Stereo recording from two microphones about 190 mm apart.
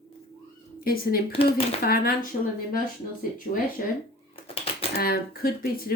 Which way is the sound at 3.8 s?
50° left (ahead or behind).